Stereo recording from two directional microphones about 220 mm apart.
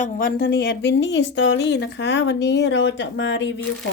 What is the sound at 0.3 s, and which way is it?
Speech, 50° left (ahead or behind).